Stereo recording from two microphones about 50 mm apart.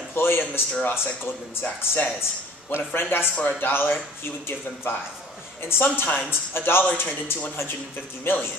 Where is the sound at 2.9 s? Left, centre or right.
Left.